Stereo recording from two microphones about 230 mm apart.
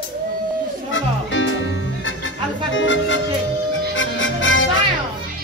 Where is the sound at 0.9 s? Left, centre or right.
Left.